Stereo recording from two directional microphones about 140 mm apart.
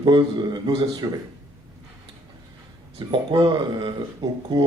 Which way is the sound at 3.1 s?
35° right (ahead or behind).